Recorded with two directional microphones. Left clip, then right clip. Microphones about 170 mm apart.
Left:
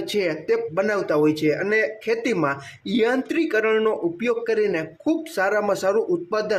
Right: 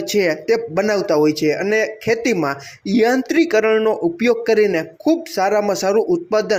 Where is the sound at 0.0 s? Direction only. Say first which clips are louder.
Right 6 dB; 20° right (ahead or behind).